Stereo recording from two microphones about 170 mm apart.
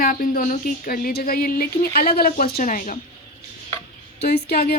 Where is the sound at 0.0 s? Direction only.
55° left (ahead or behind).